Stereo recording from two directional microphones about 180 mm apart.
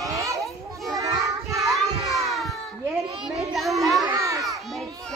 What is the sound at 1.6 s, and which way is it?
Children playing, centre (ahead or behind).